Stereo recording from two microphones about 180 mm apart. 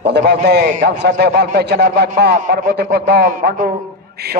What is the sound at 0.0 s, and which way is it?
A man's voice, 70° right (ahead or behind).